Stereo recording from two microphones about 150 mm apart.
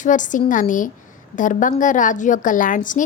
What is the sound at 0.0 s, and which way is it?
A woman's voice, 60° left (ahead or behind).